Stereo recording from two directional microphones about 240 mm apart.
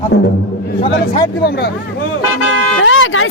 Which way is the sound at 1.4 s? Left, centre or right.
Left.